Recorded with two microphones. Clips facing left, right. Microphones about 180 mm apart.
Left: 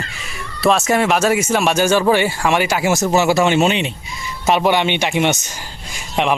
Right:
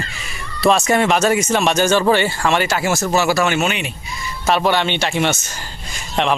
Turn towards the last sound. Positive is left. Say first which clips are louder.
# left 1 dB
turn(degrees=10)  # may be behind; listen again after turning